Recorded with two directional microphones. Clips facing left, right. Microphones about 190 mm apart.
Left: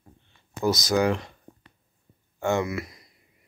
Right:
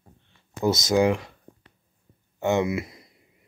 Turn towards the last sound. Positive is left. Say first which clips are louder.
# right 3 dB
turn(degrees=-25)  # may be behind; listen again after turning